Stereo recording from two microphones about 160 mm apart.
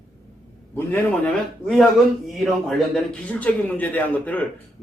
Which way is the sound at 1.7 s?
Centre (ahead or behind).